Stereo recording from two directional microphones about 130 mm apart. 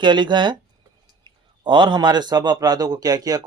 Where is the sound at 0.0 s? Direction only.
35° right (ahead or behind).